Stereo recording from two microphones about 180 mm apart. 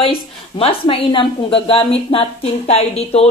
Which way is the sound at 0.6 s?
30° left (ahead or behind).